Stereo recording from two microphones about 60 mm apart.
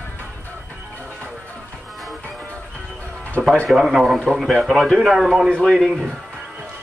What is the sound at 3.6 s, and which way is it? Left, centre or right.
A man's voice, centre.